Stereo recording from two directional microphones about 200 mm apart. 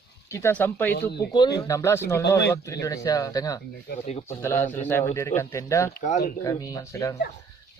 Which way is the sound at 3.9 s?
50° left (ahead or behind).